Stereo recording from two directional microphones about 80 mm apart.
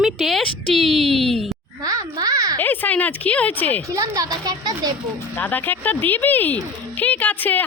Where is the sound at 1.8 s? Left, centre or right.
Right.